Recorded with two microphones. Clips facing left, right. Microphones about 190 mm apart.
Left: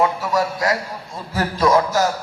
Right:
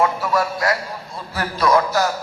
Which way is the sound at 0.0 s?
20° left (ahead or behind).